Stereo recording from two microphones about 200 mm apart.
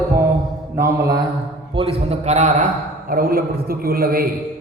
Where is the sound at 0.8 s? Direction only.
15° right (ahead or behind).